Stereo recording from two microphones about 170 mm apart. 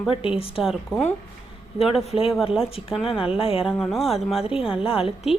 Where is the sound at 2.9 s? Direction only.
5° right (ahead or behind).